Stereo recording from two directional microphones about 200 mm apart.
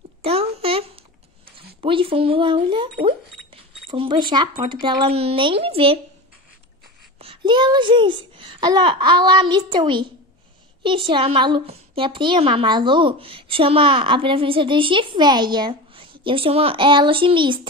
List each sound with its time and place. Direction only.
0.2 s a sound: 30° right (ahead or behind)
1.8 s a woman's voice: 25° right (ahead or behind)
7.2 s a child's voice: 25° right (ahead or behind)